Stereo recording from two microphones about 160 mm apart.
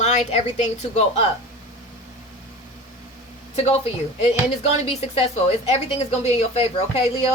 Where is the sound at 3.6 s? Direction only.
40° left (ahead or behind).